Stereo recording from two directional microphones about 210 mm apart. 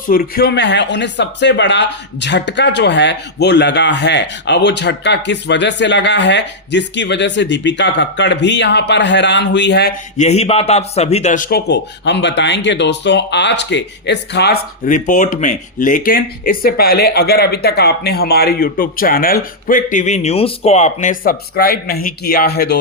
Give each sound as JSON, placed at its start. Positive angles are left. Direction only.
{"t": 0.1, "sound": "speech", "side_deg": 45}
{"t": 10.2, "sound": "a man's voice", "side_deg": 30}